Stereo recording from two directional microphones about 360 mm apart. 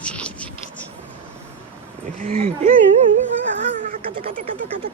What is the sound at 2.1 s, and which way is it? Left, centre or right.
Speech, centre.